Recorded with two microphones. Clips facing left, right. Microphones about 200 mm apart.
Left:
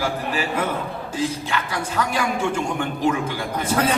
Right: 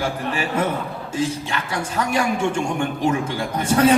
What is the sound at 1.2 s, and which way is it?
Speech, 25° right (ahead or behind).